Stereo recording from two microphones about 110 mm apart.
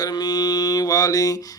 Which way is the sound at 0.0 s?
35° left (ahead or behind).